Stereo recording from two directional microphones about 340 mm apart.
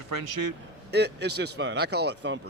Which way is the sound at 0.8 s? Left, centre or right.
Right.